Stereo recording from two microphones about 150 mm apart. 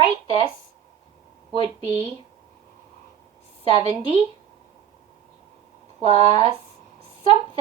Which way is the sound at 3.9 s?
40° right (ahead or behind).